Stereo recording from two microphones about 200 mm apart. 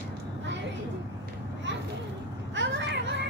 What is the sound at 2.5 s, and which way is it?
Children playing, 65° right (ahead or behind).